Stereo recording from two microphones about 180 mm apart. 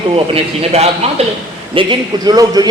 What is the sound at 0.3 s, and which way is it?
A man's voice, 35° right (ahead or behind).